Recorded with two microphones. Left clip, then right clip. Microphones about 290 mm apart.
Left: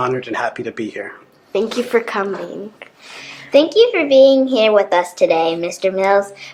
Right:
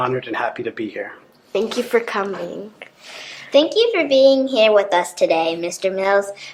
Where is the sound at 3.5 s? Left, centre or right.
Left.